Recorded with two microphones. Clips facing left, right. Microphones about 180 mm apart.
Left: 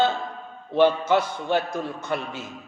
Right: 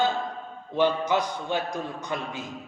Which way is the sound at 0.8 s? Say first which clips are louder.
Left 4 dB; 15° right (ahead or behind).